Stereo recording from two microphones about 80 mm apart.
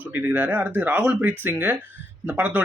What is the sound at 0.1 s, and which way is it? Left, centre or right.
Speech, right.